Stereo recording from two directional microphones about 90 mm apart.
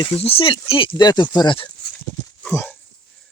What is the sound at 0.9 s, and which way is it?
Speech, 55° left (ahead or behind).